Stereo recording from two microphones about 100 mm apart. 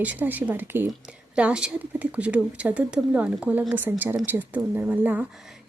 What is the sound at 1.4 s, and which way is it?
A woman's voice, 10° right (ahead or behind).